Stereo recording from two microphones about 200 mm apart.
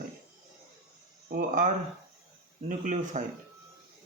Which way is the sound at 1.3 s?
40° right (ahead or behind).